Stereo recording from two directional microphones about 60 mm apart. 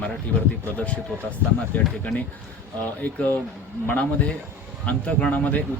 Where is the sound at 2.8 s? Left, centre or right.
Left.